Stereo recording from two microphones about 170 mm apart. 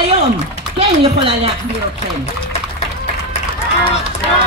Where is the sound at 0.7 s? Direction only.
35° right (ahead or behind).